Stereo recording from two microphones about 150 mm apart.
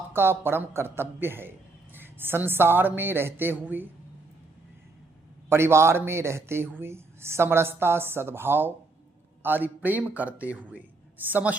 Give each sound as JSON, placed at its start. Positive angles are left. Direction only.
{"t": 0.1, "sound": "a man's voice", "side_deg": -15}
{"t": 5.5, "sound": "a man's voice", "side_deg": -15}